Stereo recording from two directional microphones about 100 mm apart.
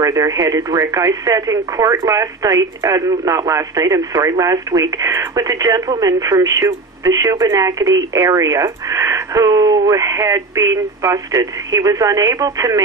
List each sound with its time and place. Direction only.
0.0 s speech: 35° right (ahead or behind)